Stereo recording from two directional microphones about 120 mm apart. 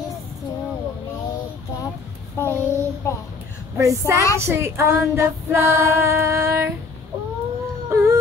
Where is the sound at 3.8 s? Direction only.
25° right (ahead or behind).